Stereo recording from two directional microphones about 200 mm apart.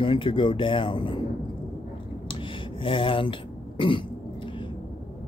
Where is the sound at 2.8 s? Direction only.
25° left (ahead or behind).